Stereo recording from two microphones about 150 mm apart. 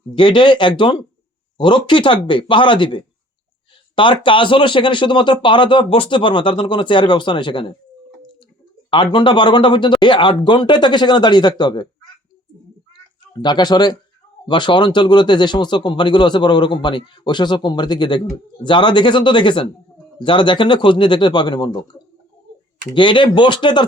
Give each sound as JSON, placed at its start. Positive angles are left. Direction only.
{"t": 0.1, "sound": "speech", "side_deg": 30}
{"t": 9.1, "sound": "speech", "side_deg": 30}
{"t": 13.3, "sound": "speech", "side_deg": 30}
{"t": 23.0, "sound": "speech", "side_deg": 35}